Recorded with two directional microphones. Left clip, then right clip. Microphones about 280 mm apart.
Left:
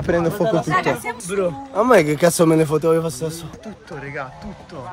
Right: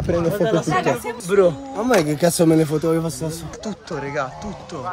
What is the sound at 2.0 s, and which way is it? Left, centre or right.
Speech, centre.